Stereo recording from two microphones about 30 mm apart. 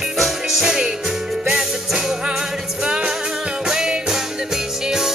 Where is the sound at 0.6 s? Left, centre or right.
Right.